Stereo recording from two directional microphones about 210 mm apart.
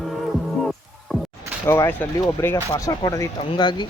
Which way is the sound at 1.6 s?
10° left (ahead or behind).